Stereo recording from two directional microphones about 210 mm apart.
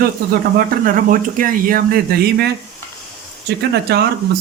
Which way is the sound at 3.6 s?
50° right (ahead or behind).